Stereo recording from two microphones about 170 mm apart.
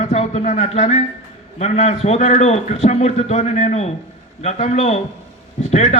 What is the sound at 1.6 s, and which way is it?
A man's voice, 40° left (ahead or behind).